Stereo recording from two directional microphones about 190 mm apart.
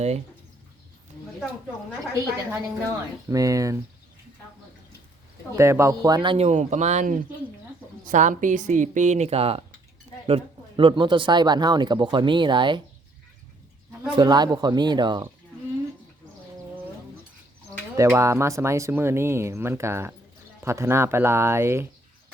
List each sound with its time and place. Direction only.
2.5 s speech: 15° right (ahead or behind)
5.5 s speech: 15° right (ahead or behind)
14.2 s speech: 20° right (ahead or behind)
17.9 s speech: 15° right (ahead or behind)